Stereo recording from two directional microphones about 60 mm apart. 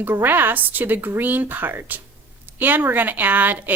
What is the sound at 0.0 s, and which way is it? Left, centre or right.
A woman's voice, right.